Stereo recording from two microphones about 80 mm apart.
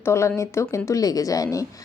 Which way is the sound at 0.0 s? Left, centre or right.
Left.